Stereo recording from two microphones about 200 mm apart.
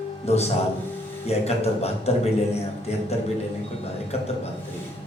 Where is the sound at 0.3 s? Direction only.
30° left (ahead or behind).